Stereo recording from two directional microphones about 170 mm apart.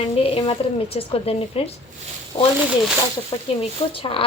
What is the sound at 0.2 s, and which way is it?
Speech, 35° left (ahead or behind).